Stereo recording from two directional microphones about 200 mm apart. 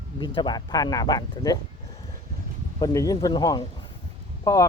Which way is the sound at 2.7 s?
15° left (ahead or behind).